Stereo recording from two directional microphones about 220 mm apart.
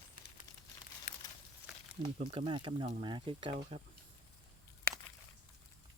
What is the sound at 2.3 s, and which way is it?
Speech, 25° right (ahead or behind).